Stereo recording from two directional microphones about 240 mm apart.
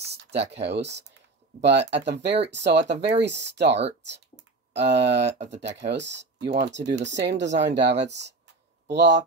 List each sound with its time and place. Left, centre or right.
0.3 s speech: right
0.7 s speech: right
4.7 s speech: right